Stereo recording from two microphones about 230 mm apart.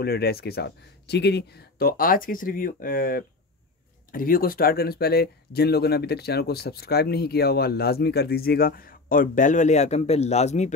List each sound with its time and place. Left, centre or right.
0.0 s speech: left